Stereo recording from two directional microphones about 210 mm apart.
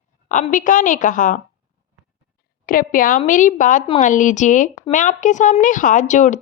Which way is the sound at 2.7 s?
40° left (ahead or behind).